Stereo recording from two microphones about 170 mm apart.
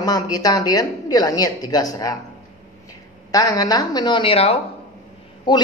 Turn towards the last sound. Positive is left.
turn(degrees=25)  # may be behind; listen again after turning